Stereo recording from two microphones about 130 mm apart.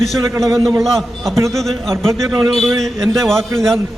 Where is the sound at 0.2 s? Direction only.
25° right (ahead or behind).